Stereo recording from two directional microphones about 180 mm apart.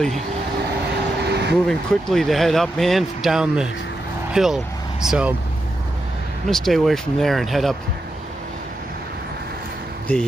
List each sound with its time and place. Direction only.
1.2 s vehicle: 65° right (ahead or behind)
1.7 s speech: centre (ahead or behind)
6.5 s speech: centre (ahead or behind)
10.1 s speech: 10° left (ahead or behind)